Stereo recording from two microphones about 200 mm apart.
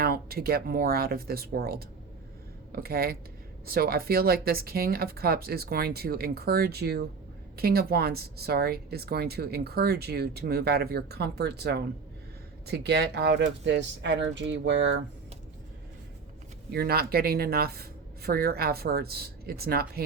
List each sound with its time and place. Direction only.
0.0 s speech: 50° right (ahead or behind)
16.7 s speech: 50° right (ahead or behind)